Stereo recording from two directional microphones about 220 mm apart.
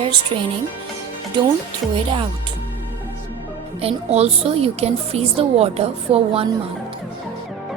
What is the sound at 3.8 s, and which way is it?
A woman's voice, 30° right (ahead or behind).